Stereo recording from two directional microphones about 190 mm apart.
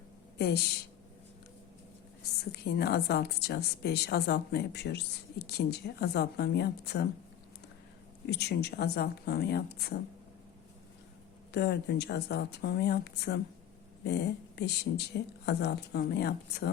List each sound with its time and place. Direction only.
0.3 s speech: 60° left (ahead or behind)
2.4 s speech: 55° left (ahead or behind)
8.3 s speech: 60° left (ahead or behind)
11.5 s speech: 60° left (ahead or behind)